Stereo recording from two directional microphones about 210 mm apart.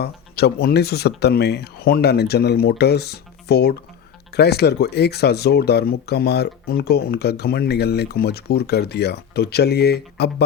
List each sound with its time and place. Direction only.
0.0 s speech: 50° left (ahead or behind)